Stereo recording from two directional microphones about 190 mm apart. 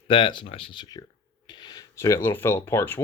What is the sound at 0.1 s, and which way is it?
Speech, 25° left (ahead or behind).